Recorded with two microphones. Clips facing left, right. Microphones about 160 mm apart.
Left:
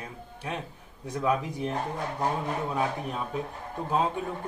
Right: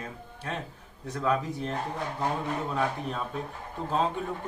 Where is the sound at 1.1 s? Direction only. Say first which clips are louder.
Left 1 dB; 15° left (ahead or behind).